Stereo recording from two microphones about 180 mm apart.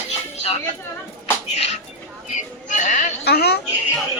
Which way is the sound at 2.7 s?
45° left (ahead or behind).